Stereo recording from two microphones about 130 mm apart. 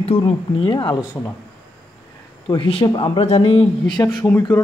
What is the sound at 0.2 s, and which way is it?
Speech, 35° left (ahead or behind).